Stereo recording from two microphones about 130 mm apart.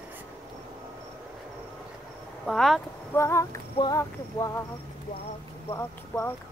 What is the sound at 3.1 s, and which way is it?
Speech, 20° left (ahead or behind).